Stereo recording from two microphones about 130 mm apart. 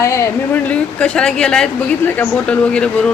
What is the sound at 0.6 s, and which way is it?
Speech, 10° left (ahead or behind).